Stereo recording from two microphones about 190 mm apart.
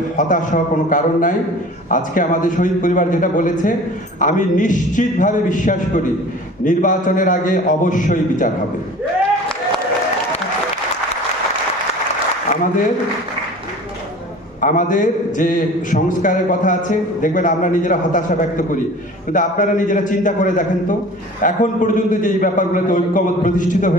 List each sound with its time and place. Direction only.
0.1 s a man's voice: 45° left (ahead or behind)
14.6 s a man's voice: 45° left (ahead or behind)